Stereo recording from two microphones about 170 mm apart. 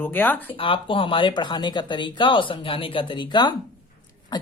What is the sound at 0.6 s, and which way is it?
A woman's voice, 30° left (ahead or behind).